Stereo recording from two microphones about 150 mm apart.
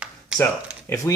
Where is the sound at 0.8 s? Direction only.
20° left (ahead or behind).